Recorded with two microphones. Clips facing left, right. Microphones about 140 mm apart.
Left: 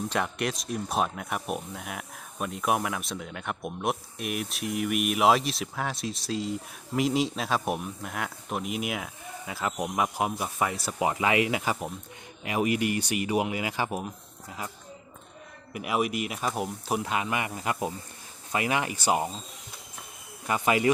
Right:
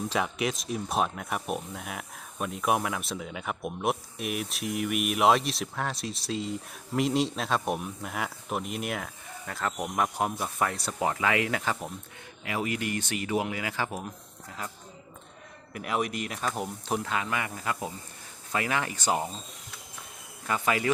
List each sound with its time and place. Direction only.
0.1 s speech: centre (ahead or behind)
11.1 s speech: 15° left (ahead or behind)
15.7 s speech: 10° left (ahead or behind)
20.5 s speech: 15° left (ahead or behind)